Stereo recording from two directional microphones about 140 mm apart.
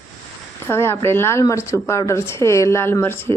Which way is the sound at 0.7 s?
20° left (ahead or behind).